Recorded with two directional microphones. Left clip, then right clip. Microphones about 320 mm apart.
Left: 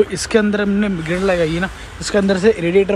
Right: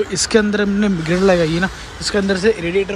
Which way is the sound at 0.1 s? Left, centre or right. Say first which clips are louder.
Right 1 dB; centre.